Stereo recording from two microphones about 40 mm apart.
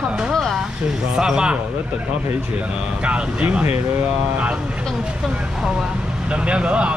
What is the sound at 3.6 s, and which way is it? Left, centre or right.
Speech, right.